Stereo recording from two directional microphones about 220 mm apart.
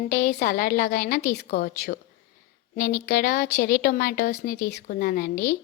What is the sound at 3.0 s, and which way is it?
A woman's voice, 40° left (ahead or behind).